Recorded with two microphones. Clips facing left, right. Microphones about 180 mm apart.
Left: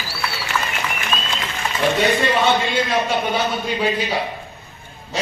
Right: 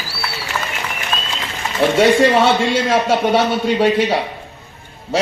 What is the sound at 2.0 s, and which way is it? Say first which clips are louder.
A man's voice: right 9 dB; 85° right.